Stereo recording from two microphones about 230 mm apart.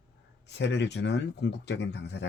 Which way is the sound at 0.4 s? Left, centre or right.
Left.